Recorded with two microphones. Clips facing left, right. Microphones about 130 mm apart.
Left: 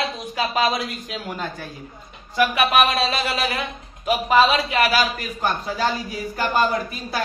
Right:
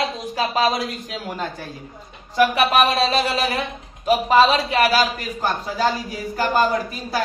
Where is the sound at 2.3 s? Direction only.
35° right (ahead or behind).